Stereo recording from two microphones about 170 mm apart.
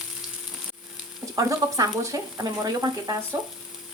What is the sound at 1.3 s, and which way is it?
Speech, 20° right (ahead or behind).